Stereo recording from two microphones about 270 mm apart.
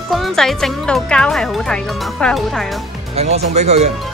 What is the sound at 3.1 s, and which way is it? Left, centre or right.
Speech, right.